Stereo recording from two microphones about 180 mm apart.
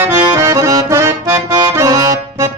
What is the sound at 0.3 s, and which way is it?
Accordion, 15° right (ahead or behind).